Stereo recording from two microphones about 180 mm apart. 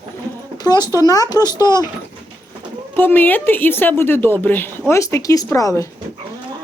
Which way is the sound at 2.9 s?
10° left (ahead or behind).